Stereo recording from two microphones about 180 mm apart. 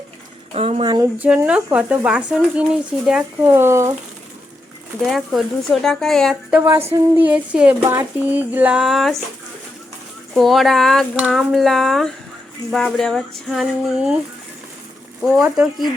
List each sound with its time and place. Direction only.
0.5 s speech: 35° right (ahead or behind)
1.2 s a sound: 5° right (ahead or behind)
5.0 s speech: centre (ahead or behind)
7.2 s a sound: 10° right (ahead or behind)
10.3 s speech: centre (ahead or behind)
15.2 s speech: centre (ahead or behind)